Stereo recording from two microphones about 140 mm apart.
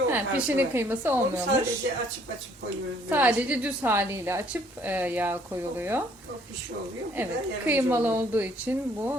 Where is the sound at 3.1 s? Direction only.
10° right (ahead or behind).